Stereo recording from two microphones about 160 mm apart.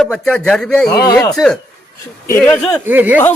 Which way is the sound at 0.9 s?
20° left (ahead or behind).